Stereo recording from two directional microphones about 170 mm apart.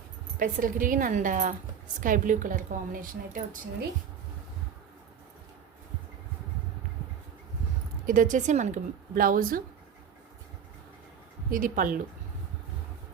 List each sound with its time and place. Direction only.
0.3 s a woman's voice: 50° right (ahead or behind)
8.0 s a woman's voice: 50° right (ahead or behind)
11.5 s a woman's voice: 55° right (ahead or behind)